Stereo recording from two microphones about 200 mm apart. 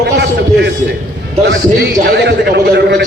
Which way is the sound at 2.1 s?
55° right (ahead or behind).